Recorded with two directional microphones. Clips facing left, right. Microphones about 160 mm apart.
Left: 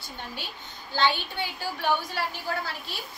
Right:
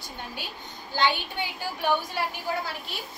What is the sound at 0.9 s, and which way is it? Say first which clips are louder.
Speech: even; 15° right (ahead or behind).